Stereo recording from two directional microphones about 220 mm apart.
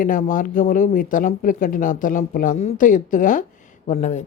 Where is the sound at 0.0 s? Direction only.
35° left (ahead or behind).